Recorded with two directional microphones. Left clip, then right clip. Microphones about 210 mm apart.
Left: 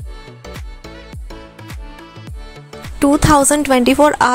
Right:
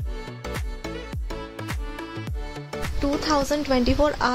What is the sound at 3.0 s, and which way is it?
A woman's voice, 45° left (ahead or behind).